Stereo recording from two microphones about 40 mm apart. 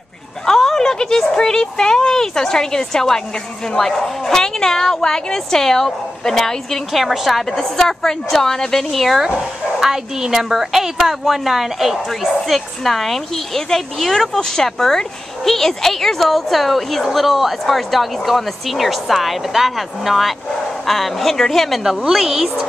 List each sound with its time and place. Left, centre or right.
0.5 s a woman's voice: centre
6.9 s speech: centre
7.4 s a woman's voice: centre
8.9 s a woman's voice: centre
22.1 s a woman's voice: centre